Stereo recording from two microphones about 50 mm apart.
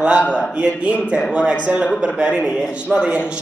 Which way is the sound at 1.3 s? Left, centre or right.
Right.